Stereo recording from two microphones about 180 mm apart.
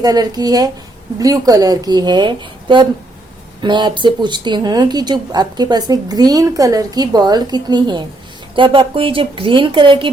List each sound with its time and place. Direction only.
0.0 s speech: 20° right (ahead or behind)